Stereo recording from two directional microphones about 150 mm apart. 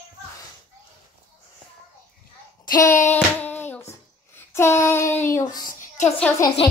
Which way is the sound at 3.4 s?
10° left (ahead or behind).